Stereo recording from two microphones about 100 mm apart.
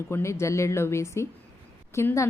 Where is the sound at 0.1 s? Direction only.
25° left (ahead or behind).